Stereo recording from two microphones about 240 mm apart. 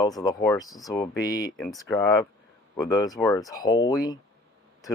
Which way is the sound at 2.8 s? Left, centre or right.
Centre.